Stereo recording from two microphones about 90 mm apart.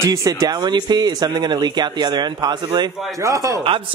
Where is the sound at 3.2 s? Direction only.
35° right (ahead or behind).